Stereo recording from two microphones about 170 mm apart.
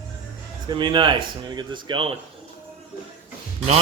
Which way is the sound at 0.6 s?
25° right (ahead or behind).